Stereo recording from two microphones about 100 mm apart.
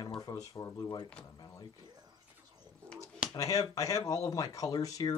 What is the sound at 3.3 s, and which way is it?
Speech, 35° left (ahead or behind).